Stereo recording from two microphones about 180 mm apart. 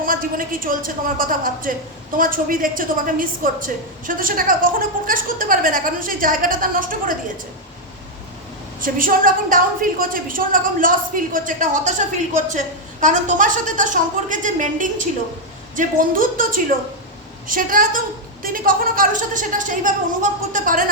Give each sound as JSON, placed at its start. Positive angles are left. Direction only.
{"t": 0.0, "sound": "a woman's voice", "side_deg": -50}
{"t": 8.8, "sound": "a woman's voice", "side_deg": -50}